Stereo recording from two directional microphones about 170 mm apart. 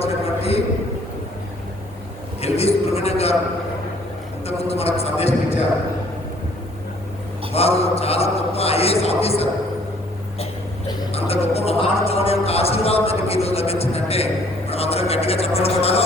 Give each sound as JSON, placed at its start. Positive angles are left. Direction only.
{"t": 0.0, "sound": "a sound", "side_deg": 35}
{"t": 2.4, "sound": "speech", "side_deg": 40}
{"t": 4.4, "sound": "speech", "side_deg": 35}
{"t": 7.5, "sound": "speech", "side_deg": 35}
{"t": 11.1, "sound": "speech", "side_deg": 35}